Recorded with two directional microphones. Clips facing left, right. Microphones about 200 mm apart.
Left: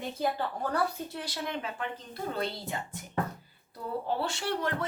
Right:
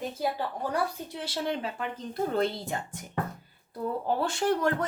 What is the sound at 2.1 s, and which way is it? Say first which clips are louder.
Speech: right 7 dB; 50° right (ahead or behind).